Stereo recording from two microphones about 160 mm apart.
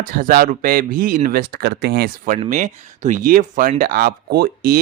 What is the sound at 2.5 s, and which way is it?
Speech, 50° right (ahead or behind).